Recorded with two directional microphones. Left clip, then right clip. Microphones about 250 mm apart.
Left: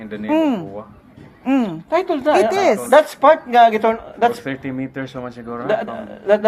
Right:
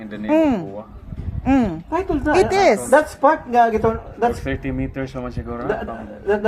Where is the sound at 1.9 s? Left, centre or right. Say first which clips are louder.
Left 4 dB; left.